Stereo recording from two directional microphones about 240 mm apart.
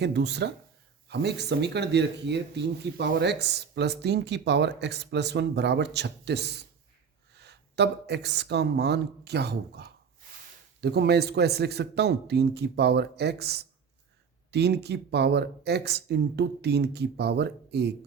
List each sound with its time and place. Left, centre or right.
0.0 s speech: right